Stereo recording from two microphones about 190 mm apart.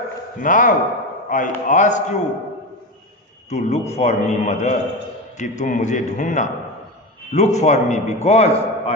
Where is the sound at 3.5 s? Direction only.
35° left (ahead or behind).